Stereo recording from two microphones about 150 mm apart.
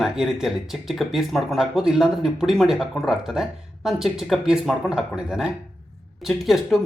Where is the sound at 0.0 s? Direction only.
Centre (ahead or behind).